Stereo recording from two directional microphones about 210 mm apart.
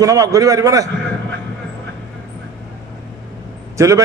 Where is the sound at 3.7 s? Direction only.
15° right (ahead or behind).